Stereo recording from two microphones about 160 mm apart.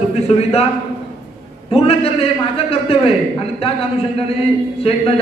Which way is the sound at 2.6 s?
35° left (ahead or behind).